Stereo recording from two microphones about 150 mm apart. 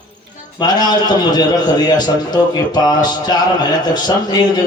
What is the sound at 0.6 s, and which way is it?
A man's voice, 25° left (ahead or behind).